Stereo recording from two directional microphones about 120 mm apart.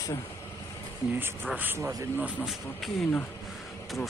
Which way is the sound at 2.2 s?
5° right (ahead or behind).